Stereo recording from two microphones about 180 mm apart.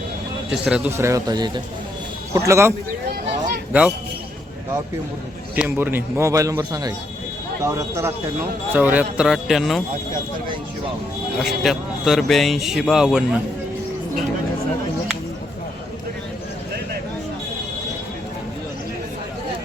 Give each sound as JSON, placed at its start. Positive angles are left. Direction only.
{"t": 0.5, "sound": "a man's voice", "side_deg": -5}
{"t": 5.5, "sound": "a man's voice", "side_deg": -10}
{"t": 11.3, "sound": "speech", "side_deg": 0}